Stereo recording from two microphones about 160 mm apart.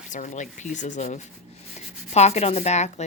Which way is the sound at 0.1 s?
50° left (ahead or behind).